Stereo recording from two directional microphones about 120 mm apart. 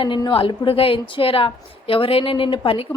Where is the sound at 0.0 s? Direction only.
40° left (ahead or behind).